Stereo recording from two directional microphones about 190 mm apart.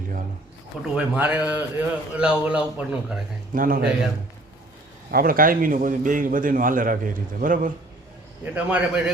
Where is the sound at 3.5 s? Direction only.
45° right (ahead or behind).